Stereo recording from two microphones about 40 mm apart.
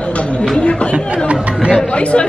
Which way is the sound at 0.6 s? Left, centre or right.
Left.